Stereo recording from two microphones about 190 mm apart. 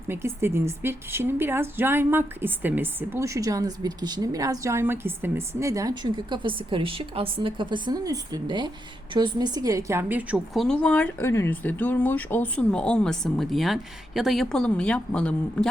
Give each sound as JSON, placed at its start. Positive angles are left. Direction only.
{"t": 0.1, "sound": "a woman's voice", "side_deg": -10}